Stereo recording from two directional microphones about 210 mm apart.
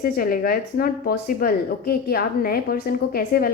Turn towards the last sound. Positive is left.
turn(degrees=45)  # may be behind; listen again after turning